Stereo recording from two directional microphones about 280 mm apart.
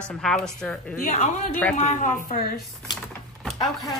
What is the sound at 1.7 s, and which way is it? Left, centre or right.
Speech, left.